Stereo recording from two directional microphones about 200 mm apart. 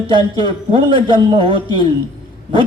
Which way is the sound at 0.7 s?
25° right (ahead or behind).